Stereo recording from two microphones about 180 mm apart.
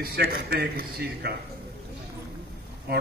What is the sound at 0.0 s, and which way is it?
Speech, 60° right (ahead or behind).